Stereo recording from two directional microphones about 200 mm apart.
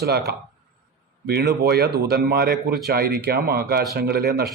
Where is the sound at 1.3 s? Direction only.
55° right (ahead or behind).